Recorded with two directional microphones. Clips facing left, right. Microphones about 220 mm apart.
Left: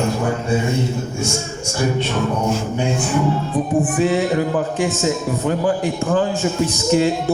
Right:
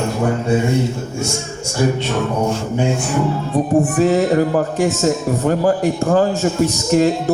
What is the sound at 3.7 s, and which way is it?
A man's voice, 40° right (ahead or behind).